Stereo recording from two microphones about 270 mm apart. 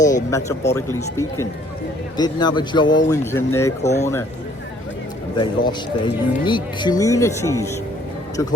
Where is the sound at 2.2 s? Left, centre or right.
Centre.